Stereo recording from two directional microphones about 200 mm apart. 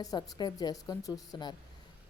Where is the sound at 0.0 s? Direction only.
20° left (ahead or behind).